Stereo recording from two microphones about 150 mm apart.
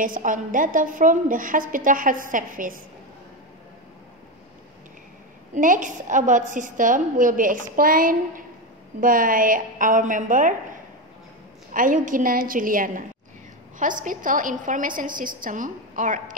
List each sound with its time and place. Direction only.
0.0 s a woman's voice: 65° right (ahead or behind)
5.5 s a woman's voice: 60° right (ahead or behind)